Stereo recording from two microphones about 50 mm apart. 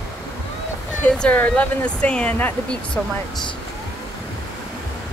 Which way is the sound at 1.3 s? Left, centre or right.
Left.